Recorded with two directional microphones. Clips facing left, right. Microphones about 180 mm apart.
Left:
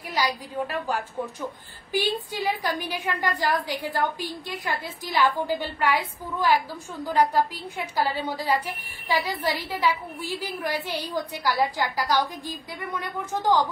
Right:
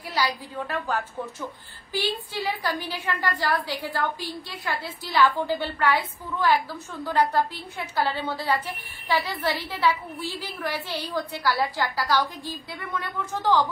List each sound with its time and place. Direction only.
0.1 s a woman's voice: 15° left (ahead or behind)
7.7 s a woman's voice: 10° left (ahead or behind)